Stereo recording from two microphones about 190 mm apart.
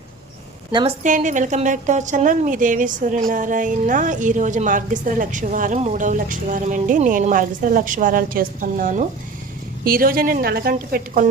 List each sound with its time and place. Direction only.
0.7 s a woman's voice: 25° right (ahead or behind)
1.0 s a woman's voice: 40° right (ahead or behind)